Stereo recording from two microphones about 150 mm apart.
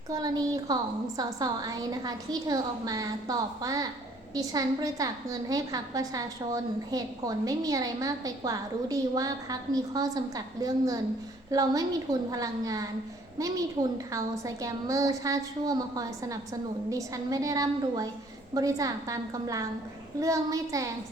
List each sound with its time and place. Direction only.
0.1 s a woman's voice: 25° right (ahead or behind)
14.1 s a woman's voice: 20° right (ahead or behind)